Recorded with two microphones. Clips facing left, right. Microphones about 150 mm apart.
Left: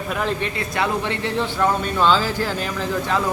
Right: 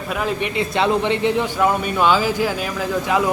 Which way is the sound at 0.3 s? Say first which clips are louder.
Right 4 dB; 20° right (ahead or behind).